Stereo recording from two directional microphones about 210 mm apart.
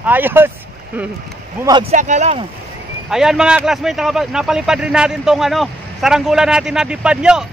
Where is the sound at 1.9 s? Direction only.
35° right (ahead or behind).